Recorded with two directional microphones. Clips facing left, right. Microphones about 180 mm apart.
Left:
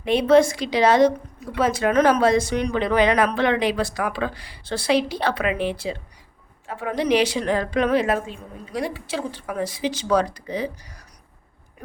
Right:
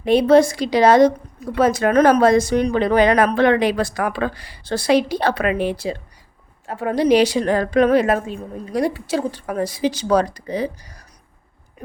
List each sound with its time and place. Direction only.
0.0 s a woman's voice: 40° right (ahead or behind)